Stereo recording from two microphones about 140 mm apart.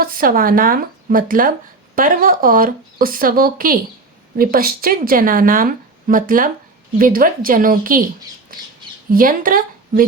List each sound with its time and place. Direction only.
0.0 s speech: 90° right
2.0 s speech: 85° right
7.0 s speech: 85° right
9.0 s speech: 85° right